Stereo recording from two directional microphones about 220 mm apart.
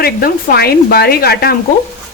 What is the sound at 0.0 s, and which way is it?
A woman's voice, 45° left (ahead or behind).